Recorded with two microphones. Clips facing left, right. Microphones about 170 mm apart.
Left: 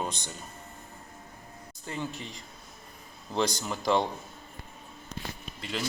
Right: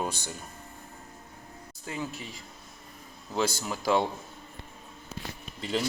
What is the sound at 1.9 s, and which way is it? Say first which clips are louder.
Speech: even; 5° right (ahead or behind).